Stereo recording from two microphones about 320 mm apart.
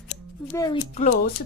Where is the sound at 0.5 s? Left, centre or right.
Centre.